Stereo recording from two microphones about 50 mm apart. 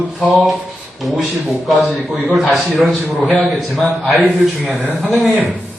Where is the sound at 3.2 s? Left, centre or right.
Left.